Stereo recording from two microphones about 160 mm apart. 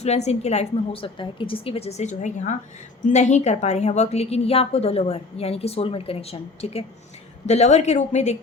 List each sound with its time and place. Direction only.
0.0 s a woman's voice: 45° left (ahead or behind)